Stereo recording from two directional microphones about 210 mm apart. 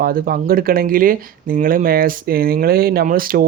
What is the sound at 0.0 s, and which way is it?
Speech, 45° right (ahead or behind).